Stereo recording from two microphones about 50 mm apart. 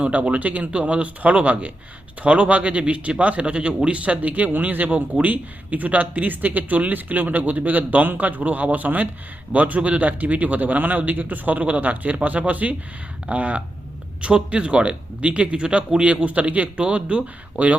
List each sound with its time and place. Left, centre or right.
0.0 s speech: right